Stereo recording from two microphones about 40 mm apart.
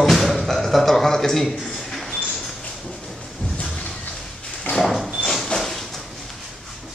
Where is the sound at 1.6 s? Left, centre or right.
Centre.